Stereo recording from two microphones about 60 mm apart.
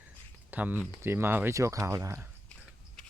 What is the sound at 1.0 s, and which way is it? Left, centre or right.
Speech, right.